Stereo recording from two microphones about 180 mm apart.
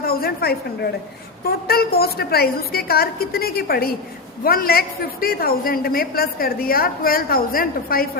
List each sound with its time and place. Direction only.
0.0 s a woman's voice: 55° left (ahead or behind)